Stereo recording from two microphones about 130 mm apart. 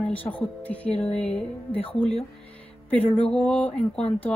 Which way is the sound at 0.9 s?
50° left (ahead or behind).